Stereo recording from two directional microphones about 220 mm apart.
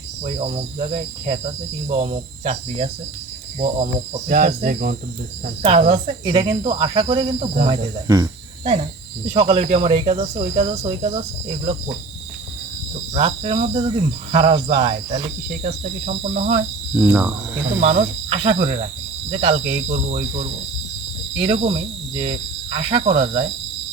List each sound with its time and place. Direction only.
0.3 s cricket: 25° right (ahead or behind)
1.9 s cricket: 30° right (ahead or behind)
5.6 s cricket: 30° right (ahead or behind)
13.1 s cricket: 25° right (ahead or behind)
17.0 s speech: 10° right (ahead or behind)
17.7 s cricket: 30° right (ahead or behind)